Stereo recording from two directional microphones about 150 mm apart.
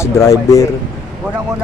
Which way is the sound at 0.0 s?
20° left (ahead or behind).